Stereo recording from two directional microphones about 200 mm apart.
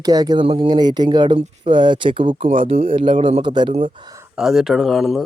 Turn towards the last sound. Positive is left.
turn(degrees=0)  # may be behind; listen again after turning